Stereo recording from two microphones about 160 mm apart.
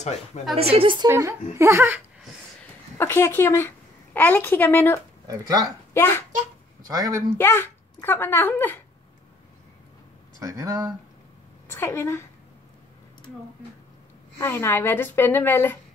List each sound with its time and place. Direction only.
0.6 s speech: 35° right (ahead or behind)
1.0 s speech: 20° right (ahead or behind)
3.0 s a woman's voice: 15° left (ahead or behind)
5.2 s speech: 25° right (ahead or behind)
5.9 s speech: 15° left (ahead or behind)
6.9 s speech: 20° right (ahead or behind)
7.3 s speech: 15° left (ahead or behind)
10.4 s speech: 20° right (ahead or behind)
11.7 s speech: 15° left (ahead or behind)
14.4 s speech: 15° left (ahead or behind)